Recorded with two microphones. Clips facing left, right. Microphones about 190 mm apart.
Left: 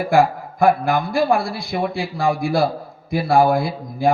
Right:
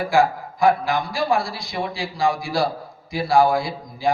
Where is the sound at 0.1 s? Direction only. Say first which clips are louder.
Left 3 dB; 55° left (ahead or behind).